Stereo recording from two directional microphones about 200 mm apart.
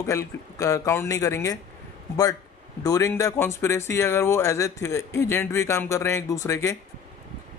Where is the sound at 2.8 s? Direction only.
15° left (ahead or behind).